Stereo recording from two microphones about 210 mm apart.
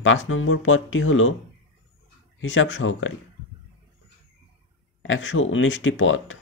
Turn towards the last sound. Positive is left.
turn(degrees=65)  # may be behind; listen again after turning